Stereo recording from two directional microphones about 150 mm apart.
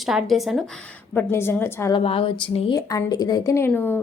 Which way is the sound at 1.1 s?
15° left (ahead or behind).